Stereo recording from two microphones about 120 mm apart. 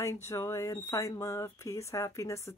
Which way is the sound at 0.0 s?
25° left (ahead or behind).